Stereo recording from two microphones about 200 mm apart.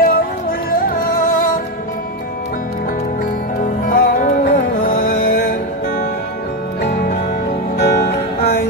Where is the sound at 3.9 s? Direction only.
45° left (ahead or behind).